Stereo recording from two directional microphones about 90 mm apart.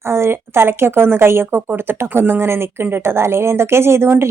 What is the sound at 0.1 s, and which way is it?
Speech, 30° right (ahead or behind).